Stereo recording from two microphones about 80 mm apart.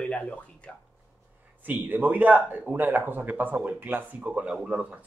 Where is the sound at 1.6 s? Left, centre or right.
Right.